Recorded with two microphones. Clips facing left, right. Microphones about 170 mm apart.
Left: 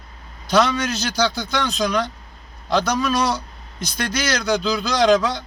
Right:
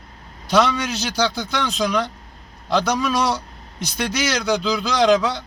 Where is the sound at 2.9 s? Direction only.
10° right (ahead or behind).